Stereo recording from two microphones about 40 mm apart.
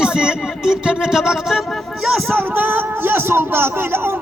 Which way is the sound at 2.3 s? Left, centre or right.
Right.